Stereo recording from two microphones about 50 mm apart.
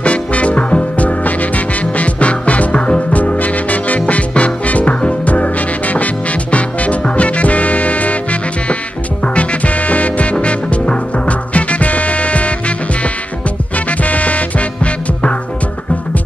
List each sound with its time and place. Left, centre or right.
0.0 s music: left